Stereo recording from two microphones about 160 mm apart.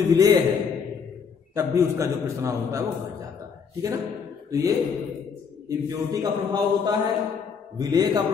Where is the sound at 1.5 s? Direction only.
20° right (ahead or behind).